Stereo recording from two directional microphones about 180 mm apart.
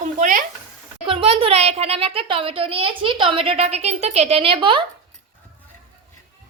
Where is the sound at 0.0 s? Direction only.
45° right (ahead or behind).